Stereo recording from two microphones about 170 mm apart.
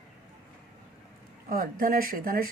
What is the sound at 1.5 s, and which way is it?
Speech, 55° right (ahead or behind).